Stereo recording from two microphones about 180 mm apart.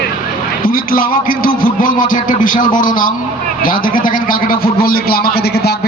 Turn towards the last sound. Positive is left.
turn(degrees=60)  # may be behind; listen again after turning